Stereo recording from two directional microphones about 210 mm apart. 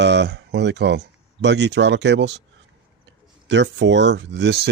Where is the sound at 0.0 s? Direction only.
55° right (ahead or behind).